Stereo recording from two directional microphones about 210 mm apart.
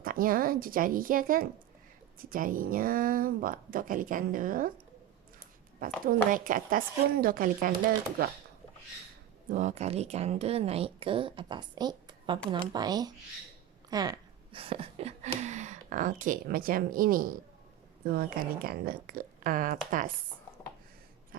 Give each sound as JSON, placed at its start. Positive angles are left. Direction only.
{"t": 0.0, "sound": "speech", "side_deg": -45}
{"t": 6.1, "sound": "speech", "side_deg": -40}
{"t": 9.5, "sound": "speech", "side_deg": -35}